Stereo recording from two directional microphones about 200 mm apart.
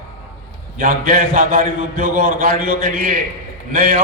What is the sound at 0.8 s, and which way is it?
A man's voice, 45° right (ahead or behind).